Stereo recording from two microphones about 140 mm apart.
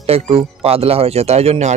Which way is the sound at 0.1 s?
45° right (ahead or behind).